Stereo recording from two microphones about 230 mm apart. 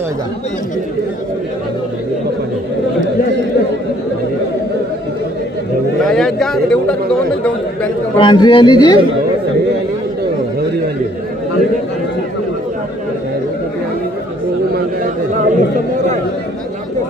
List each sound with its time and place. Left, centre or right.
6.0 s a sound: centre
8.2 s a man's voice: left
15.3 s chatter: right